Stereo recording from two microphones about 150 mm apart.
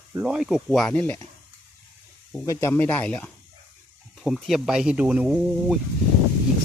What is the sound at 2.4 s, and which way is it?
Speech, 20° left (ahead or behind).